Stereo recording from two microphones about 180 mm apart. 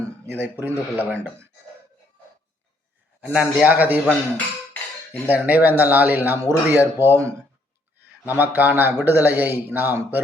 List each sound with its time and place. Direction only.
0.3 s speech: 10° right (ahead or behind)
3.2 s speech: 10° right (ahead or behind)
4.7 s cutlery: 10° left (ahead or behind)
5.3 s speech: 10° right (ahead or behind)